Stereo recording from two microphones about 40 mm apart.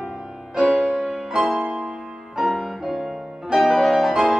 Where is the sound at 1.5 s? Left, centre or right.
Right.